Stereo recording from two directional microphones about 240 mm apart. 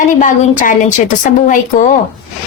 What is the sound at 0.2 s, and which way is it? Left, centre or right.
A woman's voice, left.